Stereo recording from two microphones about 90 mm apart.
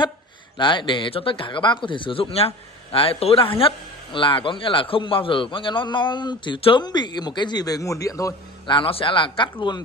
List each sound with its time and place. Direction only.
0.6 s speech: 60° left (ahead or behind); by 8.4 s 40° left (ahead or behind)
8.6 s speech: 80° left